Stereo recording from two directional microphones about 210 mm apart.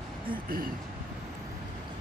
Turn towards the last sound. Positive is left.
turn(degrees=-45)  # may be behind; listen again after turning